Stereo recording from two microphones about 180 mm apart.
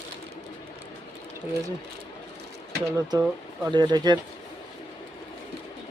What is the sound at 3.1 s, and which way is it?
Speech, 20° right (ahead or behind).